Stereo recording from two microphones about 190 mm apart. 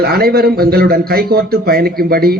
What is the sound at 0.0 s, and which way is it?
A man's voice, 55° right (ahead or behind).